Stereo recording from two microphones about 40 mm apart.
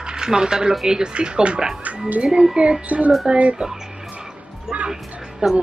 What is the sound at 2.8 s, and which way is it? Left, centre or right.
Child singing, right.